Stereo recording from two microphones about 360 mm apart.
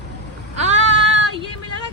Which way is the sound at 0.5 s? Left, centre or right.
Centre.